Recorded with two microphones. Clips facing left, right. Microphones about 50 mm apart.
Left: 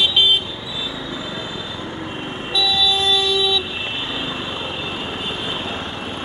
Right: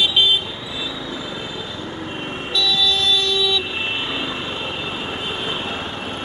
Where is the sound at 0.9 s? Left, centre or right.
Centre.